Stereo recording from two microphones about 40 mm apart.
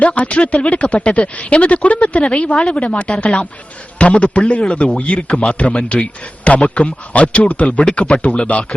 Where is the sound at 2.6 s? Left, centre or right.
Centre.